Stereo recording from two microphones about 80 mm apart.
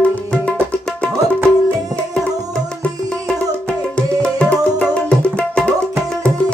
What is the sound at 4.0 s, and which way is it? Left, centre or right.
Tabla, centre.